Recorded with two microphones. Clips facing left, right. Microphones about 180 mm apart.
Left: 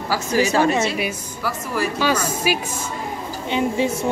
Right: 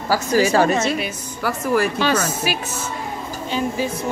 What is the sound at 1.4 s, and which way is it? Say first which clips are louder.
Speech: right 5 dB; 55° right (ahead or behind).